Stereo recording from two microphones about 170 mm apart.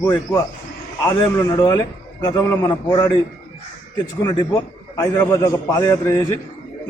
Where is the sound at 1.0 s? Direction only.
20° left (ahead or behind).